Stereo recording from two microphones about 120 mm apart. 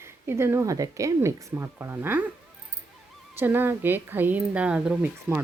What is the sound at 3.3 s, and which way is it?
Speech, 15° right (ahead or behind).